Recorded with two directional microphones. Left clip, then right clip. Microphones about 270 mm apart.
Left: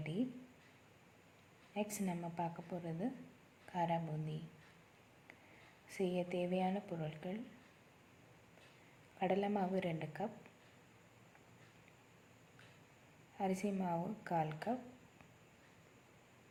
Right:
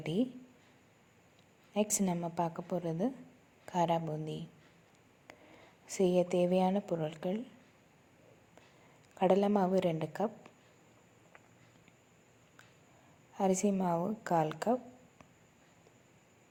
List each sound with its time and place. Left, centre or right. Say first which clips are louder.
0.0 s a sound: right 8 dB; right
1.7 s speech: right 9 dB; right
5.9 s speech: right 10 dB; right
9.1 s speech: right 9 dB; right
13.3 s speech: right 9 dB; right